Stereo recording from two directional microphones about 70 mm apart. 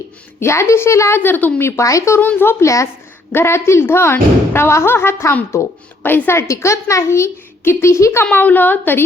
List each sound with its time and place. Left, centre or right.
0.3 s a child's voice: left
1.2 s a woman's voice: left
1.6 s a child's voice: left
2.2 s a child's voice: left
2.6 s a woman's voice: left
3.3 s a child's voice: left
8.3 s a woman's voice: left